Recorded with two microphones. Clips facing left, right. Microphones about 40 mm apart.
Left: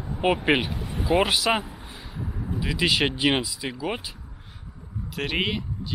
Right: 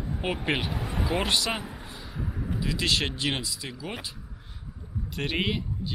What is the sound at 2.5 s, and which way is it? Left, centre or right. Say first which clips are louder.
Speech: left 4 dB; centre.